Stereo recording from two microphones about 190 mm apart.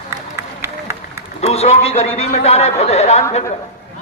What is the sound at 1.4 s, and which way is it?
A man's voice, 35° left (ahead or behind).